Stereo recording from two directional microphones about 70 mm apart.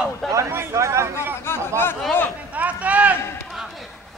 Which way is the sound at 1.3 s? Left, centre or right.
Left.